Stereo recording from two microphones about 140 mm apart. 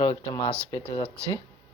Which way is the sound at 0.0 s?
35° left (ahead or behind).